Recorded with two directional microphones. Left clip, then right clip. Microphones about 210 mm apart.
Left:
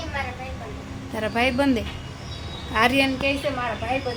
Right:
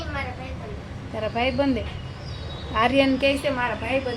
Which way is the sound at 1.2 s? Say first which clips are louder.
Left 2 dB; 5° left (ahead or behind).